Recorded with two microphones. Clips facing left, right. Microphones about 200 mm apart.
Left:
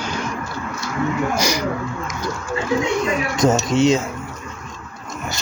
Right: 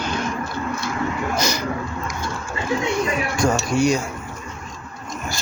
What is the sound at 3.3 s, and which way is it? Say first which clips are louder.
Speech: left 4 dB; 20° left (ahead or behind).